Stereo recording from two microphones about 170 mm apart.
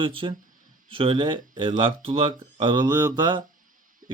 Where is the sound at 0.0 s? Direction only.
30° right (ahead or behind).